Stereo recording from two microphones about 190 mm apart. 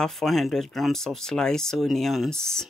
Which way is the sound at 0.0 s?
Centre (ahead or behind).